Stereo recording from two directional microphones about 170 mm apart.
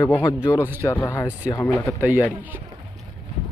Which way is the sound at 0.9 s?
15° left (ahead or behind).